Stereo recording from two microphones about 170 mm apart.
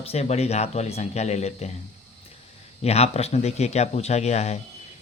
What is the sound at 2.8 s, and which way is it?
Speech, 40° left (ahead or behind).